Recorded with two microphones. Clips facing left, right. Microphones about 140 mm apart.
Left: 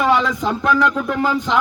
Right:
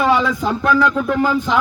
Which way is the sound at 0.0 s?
Centre (ahead or behind).